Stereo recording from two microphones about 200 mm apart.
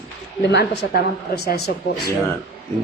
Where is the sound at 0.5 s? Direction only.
60° left (ahead or behind).